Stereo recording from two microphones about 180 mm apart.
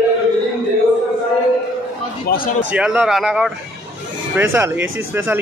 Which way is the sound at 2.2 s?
50° left (ahead or behind).